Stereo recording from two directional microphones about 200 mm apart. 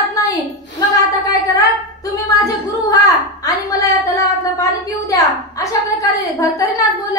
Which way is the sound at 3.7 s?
15° left (ahead or behind).